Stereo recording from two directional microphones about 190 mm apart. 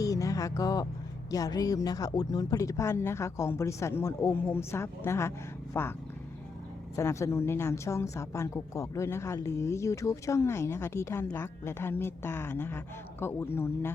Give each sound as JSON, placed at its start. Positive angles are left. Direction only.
{"t": 0.0, "sound": "a sound", "side_deg": 15}
{"t": 1.3, "sound": "a woman's voice", "side_deg": 20}
{"t": 6.9, "sound": "a woman's voice", "side_deg": 15}